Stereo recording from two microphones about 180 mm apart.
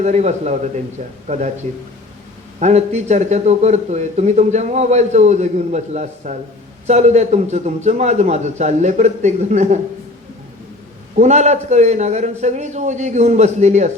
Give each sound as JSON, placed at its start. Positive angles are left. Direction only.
{"t": 0.0, "sound": "a man's voice", "side_deg": -40}
{"t": 2.6, "sound": "a man's voice", "side_deg": -40}
{"t": 11.1, "sound": "a man's voice", "side_deg": -40}